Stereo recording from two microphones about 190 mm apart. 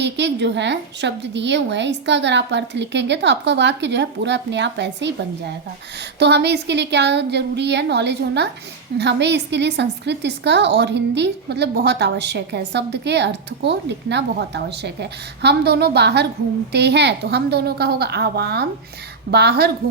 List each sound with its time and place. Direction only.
0.0 s a woman's voice: 65° right (ahead or behind)
6.1 s a woman's voice: 60° right (ahead or behind)